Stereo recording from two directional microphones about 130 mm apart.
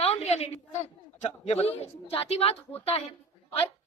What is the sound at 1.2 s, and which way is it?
A man's voice, 55° left (ahead or behind).